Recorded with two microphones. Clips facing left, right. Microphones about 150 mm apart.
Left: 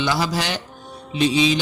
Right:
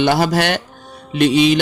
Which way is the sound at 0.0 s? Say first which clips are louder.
Right 7 dB; 60° right (ahead or behind).